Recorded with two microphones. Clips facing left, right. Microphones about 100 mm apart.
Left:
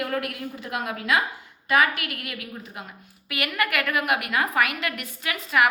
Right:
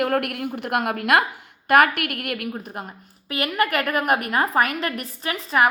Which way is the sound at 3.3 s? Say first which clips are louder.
Right 4 dB; 35° right (ahead or behind).